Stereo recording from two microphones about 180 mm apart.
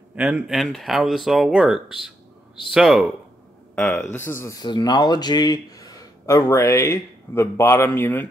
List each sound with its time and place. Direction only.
0.1 s speech: 5° right (ahead or behind)
3.7 s speech: 10° left (ahead or behind)